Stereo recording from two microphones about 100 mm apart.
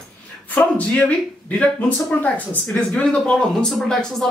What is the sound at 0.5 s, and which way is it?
Speech, 15° left (ahead or behind).